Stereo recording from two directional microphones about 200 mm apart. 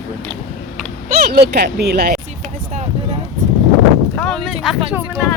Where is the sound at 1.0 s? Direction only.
55° right (ahead or behind).